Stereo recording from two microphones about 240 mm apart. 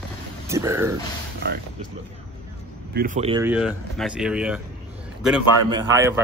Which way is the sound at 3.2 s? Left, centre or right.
Right.